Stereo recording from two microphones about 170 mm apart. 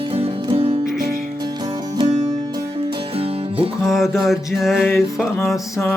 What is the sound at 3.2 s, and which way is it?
Music, 35° right (ahead or behind).